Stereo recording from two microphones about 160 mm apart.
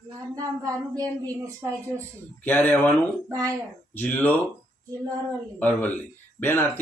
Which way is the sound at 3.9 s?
10° left (ahead or behind).